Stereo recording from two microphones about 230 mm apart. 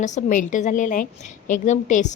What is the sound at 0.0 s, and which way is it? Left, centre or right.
A woman's voice, left.